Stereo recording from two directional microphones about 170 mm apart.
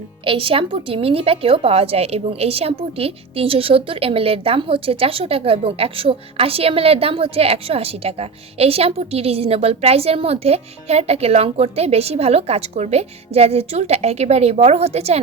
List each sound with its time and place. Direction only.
0.3 s a woman's voice: 30° right (ahead or behind)